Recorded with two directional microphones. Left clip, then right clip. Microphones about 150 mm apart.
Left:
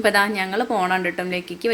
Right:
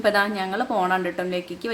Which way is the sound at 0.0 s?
10° left (ahead or behind).